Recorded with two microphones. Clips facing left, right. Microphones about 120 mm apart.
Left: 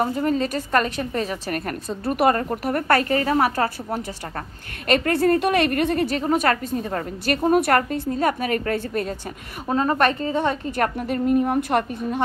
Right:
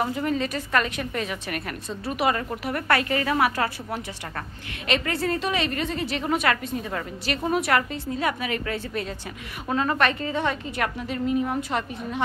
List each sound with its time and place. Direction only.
0.0 s a woman's voice: 35° left (ahead or behind)
4.8 s a woman's voice: 50° left (ahead or behind)
6.1 s a woman's voice: 40° left (ahead or behind)
9.7 s a woman's voice: 35° left (ahead or behind)